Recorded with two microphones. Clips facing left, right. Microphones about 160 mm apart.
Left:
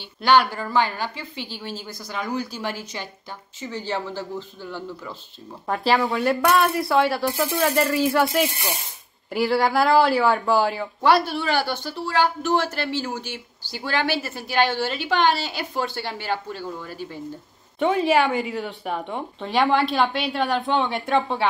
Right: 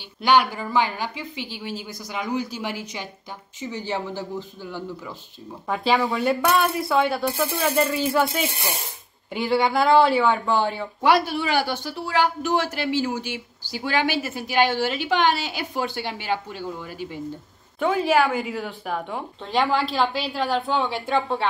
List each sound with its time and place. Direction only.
0.2 s speech: 15° right (ahead or behind)
5.7 s speech: centre (ahead or behind)
11.0 s speech: 10° right (ahead or behind)
17.7 s speech: centre (ahead or behind)